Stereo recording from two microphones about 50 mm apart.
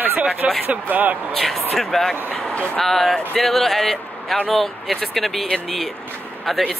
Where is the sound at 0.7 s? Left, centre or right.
Right.